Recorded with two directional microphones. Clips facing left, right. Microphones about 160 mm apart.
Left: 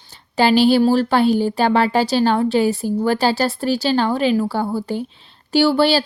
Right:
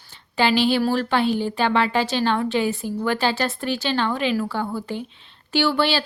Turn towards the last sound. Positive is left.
turn(degrees=35)  # may be behind; listen again after turning